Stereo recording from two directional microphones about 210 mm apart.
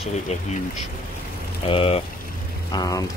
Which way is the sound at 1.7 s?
25° left (ahead or behind).